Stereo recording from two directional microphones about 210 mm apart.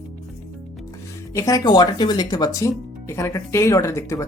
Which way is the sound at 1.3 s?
15° left (ahead or behind).